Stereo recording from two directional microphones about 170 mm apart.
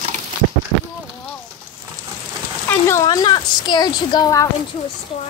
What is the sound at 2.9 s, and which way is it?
A woman's voice, 20° left (ahead or behind).